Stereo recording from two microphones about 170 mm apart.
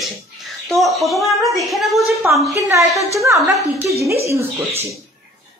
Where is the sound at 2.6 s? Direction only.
20° right (ahead or behind).